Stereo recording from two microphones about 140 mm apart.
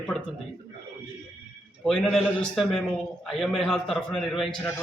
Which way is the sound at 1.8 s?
5° left (ahead or behind).